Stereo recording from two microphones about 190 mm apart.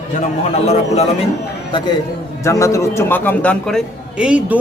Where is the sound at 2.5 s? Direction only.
15° left (ahead or behind).